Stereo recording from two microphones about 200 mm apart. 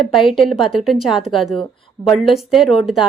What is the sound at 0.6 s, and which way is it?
A woman's voice, centre (ahead or behind).